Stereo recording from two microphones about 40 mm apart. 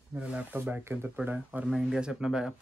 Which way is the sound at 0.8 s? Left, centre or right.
Right.